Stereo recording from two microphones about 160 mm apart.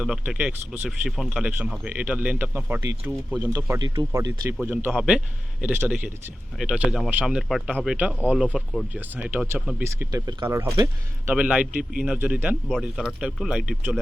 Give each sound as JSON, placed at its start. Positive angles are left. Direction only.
{"t": 0.0, "sound": "speech", "side_deg": -5}
{"t": 3.8, "sound": "speech", "side_deg": -25}
{"t": 11.3, "sound": "speech", "side_deg": -5}